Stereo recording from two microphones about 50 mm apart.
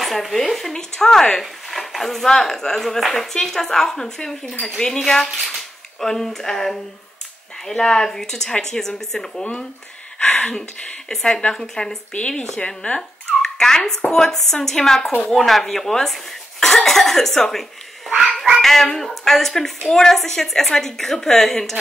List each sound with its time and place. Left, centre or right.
0.0 s speech: centre
1.4 s a woman's voice: centre
9.4 s a woman's voice: centre
11.1 s a woman's voice: centre
12.1 s a woman's voice: left; by 21.7 s centre